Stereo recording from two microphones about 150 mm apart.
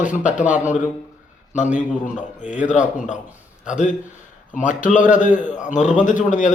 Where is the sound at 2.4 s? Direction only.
55° left (ahead or behind).